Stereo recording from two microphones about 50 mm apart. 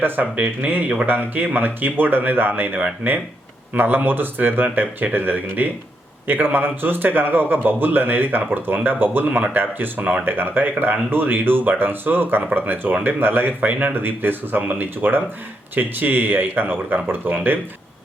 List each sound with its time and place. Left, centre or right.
0.0 s a man's voice: right